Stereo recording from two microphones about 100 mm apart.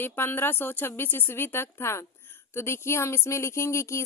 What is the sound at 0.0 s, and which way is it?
Speech, 20° left (ahead or behind).